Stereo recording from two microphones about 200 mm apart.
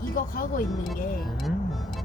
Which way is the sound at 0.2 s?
45° left (ahead or behind).